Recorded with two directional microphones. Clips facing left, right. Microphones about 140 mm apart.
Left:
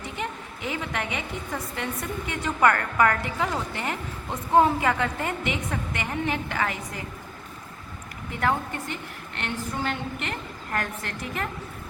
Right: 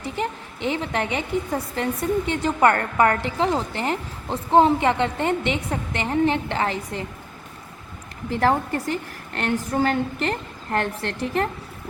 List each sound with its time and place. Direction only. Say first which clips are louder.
0.2 s a woman's voice: right 6 dB; 30° right (ahead or behind)
8.3 s a woman's voice: right 6 dB; 35° right (ahead or behind)